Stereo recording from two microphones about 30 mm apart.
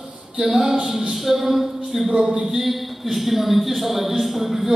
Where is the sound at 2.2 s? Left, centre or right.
Right.